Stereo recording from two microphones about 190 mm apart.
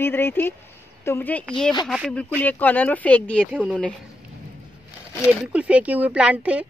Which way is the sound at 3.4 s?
5° right (ahead or behind).